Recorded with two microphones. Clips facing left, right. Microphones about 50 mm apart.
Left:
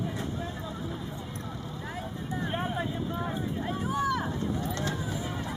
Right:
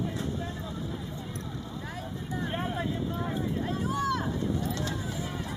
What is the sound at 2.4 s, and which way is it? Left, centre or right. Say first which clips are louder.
Vehicle: even; centre.